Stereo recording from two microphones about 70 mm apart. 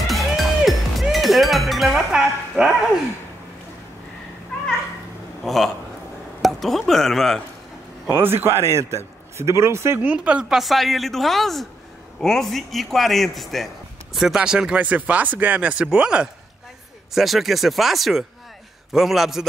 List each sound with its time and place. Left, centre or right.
0.0 s music: centre
5.4 s a man's voice: centre
8.1 s a man's voice: right
10.0 s speech: centre
10.5 s a man's voice: centre
14.8 s speech: right
17.1 s a man's voice: centre